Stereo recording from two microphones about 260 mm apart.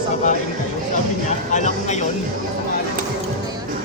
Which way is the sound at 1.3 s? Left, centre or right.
Left.